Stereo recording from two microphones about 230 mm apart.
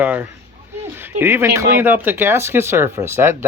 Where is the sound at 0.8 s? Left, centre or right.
Centre.